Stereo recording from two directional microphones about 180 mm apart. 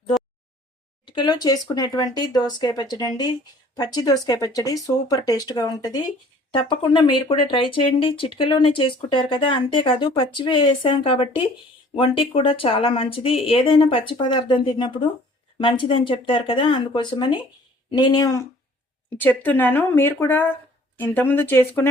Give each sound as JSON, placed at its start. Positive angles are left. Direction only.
{"t": 1.0, "sound": "a woman's voice", "side_deg": 25}